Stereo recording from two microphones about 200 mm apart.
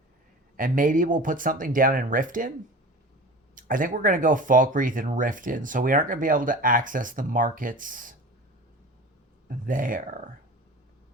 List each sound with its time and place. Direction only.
0.5 s speech: 40° right (ahead or behind)
3.5 s speech: 40° right (ahead or behind)
9.5 s speech: 40° right (ahead or behind)